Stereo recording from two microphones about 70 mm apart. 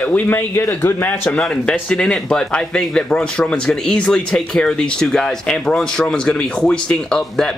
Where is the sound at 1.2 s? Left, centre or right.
Centre.